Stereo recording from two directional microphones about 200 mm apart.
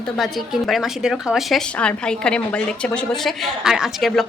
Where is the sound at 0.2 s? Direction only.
Centre (ahead or behind).